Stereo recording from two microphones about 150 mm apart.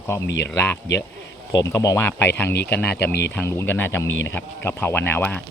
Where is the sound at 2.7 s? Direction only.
10° left (ahead or behind).